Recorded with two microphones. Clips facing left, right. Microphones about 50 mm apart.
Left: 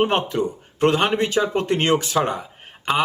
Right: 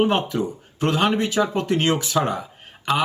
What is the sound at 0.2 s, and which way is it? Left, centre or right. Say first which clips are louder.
Speech: left 2 dB; left.